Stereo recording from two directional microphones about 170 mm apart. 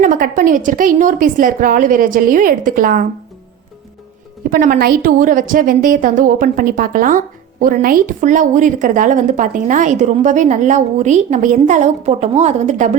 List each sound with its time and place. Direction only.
0.0 s a woman's voice: 55° right (ahead or behind)
4.4 s a woman's voice: 55° right (ahead or behind)